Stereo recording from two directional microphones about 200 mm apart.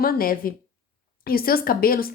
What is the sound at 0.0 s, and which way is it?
Speech, 45° left (ahead or behind).